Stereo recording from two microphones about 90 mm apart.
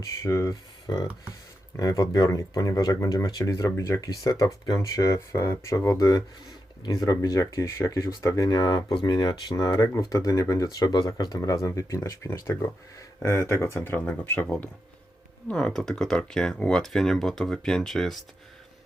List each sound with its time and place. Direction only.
0.2 s speech: 35° left (ahead or behind)
1.8 s speech: 45° left (ahead or behind); by 14.1 s 25° left (ahead or behind)
14.3 s speech: 10° left (ahead or behind)